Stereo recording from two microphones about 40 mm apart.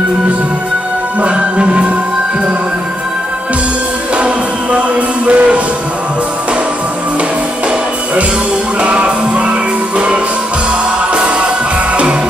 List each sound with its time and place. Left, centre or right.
1.2 s music: right
4.7 s music: right
8.8 s music: right